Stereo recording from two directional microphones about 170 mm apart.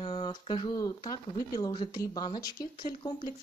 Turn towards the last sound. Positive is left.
turn(degrees=25)  # may be behind; listen again after turning